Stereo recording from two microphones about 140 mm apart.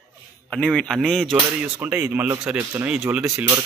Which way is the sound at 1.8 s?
15° right (ahead or behind).